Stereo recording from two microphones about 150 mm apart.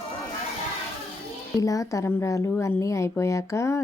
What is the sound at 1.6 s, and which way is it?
A woman's voice, 20° left (ahead or behind).